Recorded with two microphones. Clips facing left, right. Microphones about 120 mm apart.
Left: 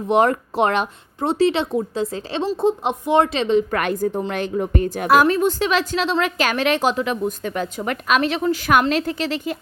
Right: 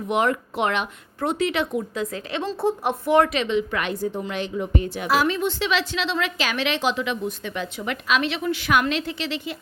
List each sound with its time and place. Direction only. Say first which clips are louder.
0.1 s speech: left 5 dB; 40° left (ahead or behind)
2.4 s speech: left 4 dB; 15° left (ahead or behind); by 3.6 s 30° left (ahead or behind)
3.7 s a woman's voice: left 5 dB; 50° left (ahead or behind)